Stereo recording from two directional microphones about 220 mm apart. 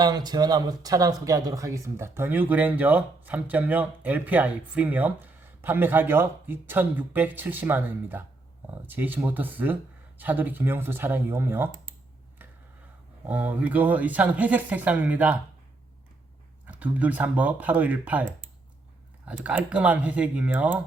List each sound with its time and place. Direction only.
0.0 s speech: 20° right (ahead or behind)
13.2 s speech: 10° right (ahead or behind)
16.6 s speech: 5° right (ahead or behind)